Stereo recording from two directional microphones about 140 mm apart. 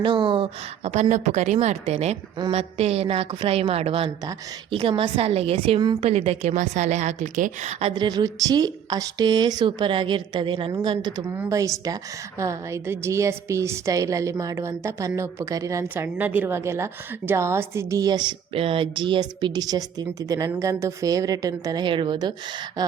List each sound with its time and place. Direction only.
0.0 s a woman's voice: 35° right (ahead or behind)
1.0 s a woman's voice: 55° right (ahead or behind); by 10.8 s 35° right (ahead or behind)
11.2 s a woman's voice: 20° right (ahead or behind)
18.5 s a woman's voice: 40° right (ahead or behind)